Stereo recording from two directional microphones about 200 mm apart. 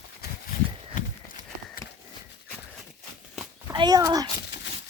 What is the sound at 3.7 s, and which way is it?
Speech, 20° right (ahead or behind).